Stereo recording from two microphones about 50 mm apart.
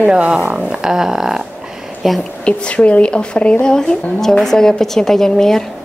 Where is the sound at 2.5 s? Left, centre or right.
Left; by 5.6 s centre.